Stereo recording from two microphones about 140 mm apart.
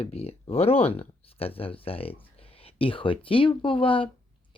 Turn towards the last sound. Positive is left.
turn(degrees=40)  # may be behind; listen again after turning